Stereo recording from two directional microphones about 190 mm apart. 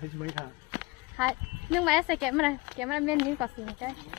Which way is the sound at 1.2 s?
Centre (ahead or behind).